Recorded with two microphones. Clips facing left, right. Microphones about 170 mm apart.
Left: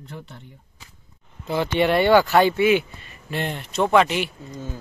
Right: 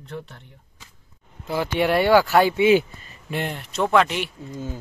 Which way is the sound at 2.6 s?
30° right (ahead or behind).